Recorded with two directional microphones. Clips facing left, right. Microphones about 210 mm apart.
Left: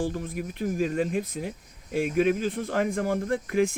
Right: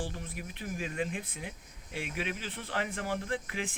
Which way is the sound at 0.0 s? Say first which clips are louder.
Left 10 dB; 45° left (ahead or behind).